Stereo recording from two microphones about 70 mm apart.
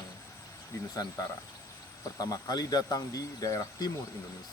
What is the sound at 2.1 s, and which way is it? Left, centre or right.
Speech, left.